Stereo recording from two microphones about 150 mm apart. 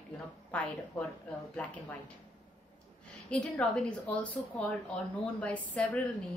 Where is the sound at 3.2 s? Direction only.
10° left (ahead or behind).